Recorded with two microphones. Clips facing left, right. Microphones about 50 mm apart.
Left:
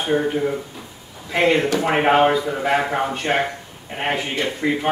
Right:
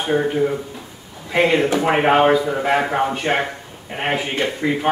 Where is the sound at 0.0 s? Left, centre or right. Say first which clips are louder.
Right 2 dB; centre.